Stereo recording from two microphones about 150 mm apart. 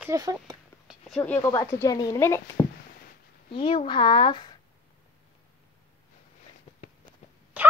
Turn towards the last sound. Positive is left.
turn(degrees=-10)  # may be behind; listen again after turning